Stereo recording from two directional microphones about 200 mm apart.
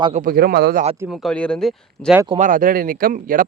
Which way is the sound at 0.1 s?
45° right (ahead or behind).